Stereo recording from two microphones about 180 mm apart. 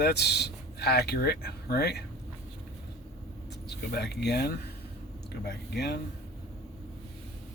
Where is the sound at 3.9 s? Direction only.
65° left (ahead or behind).